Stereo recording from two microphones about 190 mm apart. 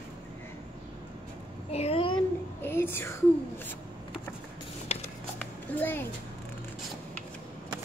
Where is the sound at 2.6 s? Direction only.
10° left (ahead or behind).